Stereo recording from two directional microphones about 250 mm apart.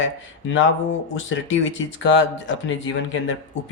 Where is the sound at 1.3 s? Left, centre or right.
Left.